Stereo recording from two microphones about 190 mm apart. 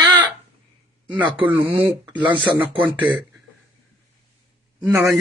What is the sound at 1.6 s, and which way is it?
Speech, 25° right (ahead or behind).